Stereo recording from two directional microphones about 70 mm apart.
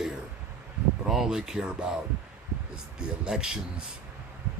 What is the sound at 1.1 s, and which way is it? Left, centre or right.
Speech, centre.